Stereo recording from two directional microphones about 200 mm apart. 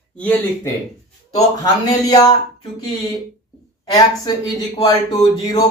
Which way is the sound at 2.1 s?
20° left (ahead or behind).